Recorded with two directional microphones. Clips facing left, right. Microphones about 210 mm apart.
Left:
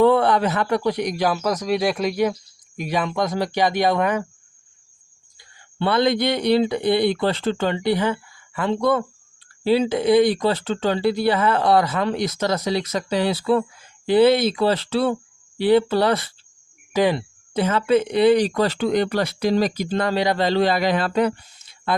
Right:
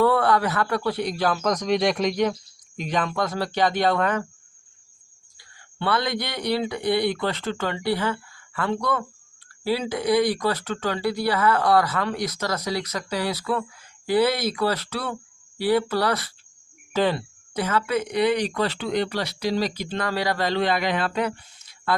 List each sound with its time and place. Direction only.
0.0 s a man's voice: 20° left (ahead or behind)
5.4 s speech: 25° left (ahead or behind)
16.9 s a man's voice: 15° left (ahead or behind)
17.5 s speech: 25° left (ahead or behind); by 20.0 s 45° left (ahead or behind)
20.0 s speech: 20° left (ahead or behind); by 21.3 s 40° left (ahead or behind)
21.9 s speech: 20° left (ahead or behind)